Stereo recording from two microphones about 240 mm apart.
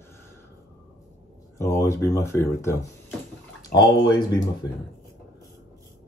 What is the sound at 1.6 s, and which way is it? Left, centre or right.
Speech, centre.